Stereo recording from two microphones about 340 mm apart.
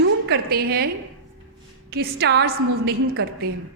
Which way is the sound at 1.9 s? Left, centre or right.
Right.